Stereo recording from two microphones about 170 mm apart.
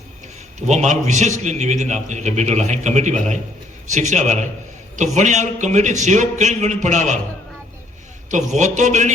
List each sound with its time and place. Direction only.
0.7 s speech: 45° right (ahead or behind)
8.3 s speech: 45° right (ahead or behind)